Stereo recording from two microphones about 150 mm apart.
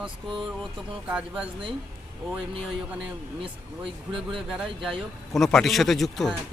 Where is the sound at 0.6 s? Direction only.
5° right (ahead or behind).